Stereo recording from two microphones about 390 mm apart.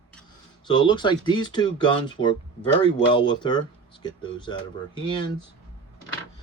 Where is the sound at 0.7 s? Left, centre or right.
Centre.